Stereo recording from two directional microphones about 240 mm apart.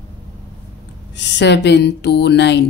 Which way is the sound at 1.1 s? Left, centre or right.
Left.